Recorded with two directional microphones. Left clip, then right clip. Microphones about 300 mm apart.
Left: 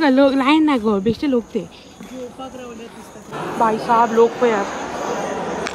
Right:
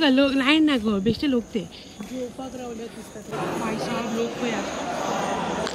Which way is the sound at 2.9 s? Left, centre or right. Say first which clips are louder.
Left 2 dB; centre.